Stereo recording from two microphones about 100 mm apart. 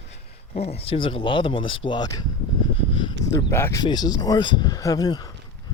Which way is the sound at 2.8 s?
55° left (ahead or behind).